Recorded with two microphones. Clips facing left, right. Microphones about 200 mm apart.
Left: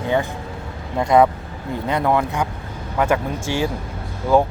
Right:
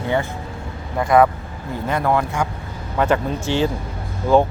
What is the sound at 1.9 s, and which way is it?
Speech, 15° left (ahead or behind).